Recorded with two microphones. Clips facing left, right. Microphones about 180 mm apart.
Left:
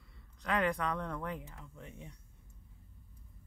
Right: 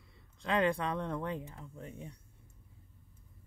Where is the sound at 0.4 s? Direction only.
30° right (ahead or behind).